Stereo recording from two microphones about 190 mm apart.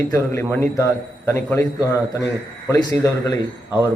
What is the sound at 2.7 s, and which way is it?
Speech, 20° left (ahead or behind).